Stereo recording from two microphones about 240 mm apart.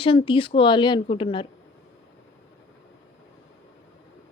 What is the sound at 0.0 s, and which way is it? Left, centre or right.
A woman's voice, left.